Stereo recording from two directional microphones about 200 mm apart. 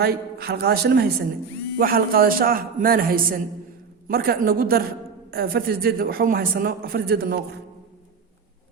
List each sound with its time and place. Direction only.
0.0 s a man's voice: 50° right (ahead or behind)